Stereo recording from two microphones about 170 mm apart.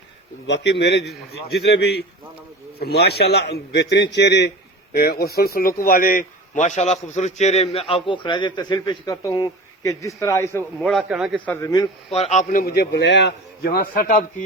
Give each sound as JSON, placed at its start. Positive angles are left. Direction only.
{"t": 0.4, "sound": "a man's voice", "side_deg": 90}
{"t": 10.8, "sound": "a man's voice", "side_deg": 0}
{"t": 11.4, "sound": "speech", "side_deg": 20}
{"t": 12.1, "sound": "a man's voice", "side_deg": 40}